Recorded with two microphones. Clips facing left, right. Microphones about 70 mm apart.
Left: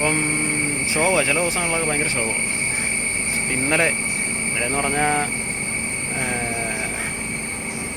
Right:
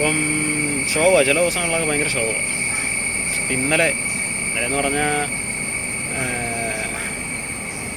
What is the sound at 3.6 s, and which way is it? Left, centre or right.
Speech, left.